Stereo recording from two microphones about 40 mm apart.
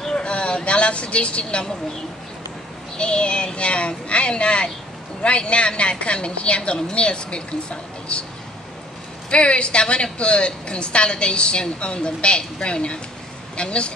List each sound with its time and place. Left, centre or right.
0.1 s vehicle: left
3.0 s a woman's voice: left
9.3 s a woman's voice: left